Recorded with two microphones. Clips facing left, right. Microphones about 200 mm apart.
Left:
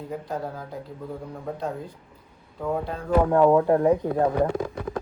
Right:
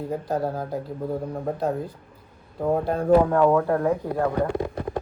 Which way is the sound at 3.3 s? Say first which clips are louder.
Left 2 dB; 20° left (ahead or behind).